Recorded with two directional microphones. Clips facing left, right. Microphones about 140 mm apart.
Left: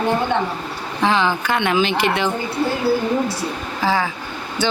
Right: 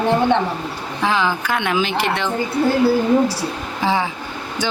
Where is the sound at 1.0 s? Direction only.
5° right (ahead or behind).